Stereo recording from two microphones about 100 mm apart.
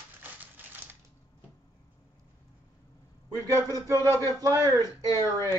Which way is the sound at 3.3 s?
30° right (ahead or behind).